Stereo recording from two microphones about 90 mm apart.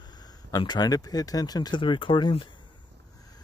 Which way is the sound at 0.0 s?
50° left (ahead or behind).